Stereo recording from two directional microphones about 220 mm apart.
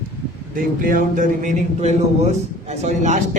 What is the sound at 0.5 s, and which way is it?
Speech, 40° right (ahead or behind).